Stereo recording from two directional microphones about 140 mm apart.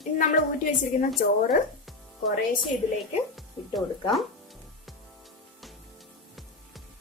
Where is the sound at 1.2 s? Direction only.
90° left.